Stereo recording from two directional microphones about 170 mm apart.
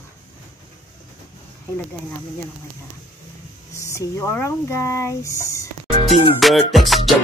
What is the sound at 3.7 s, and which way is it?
Speech, 15° left (ahead or behind).